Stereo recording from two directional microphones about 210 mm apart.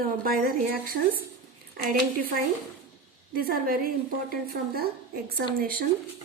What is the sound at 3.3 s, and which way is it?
A woman's voice, 45° right (ahead or behind).